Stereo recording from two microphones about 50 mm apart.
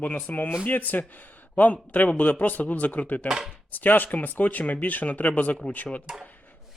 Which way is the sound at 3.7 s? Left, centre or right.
Left.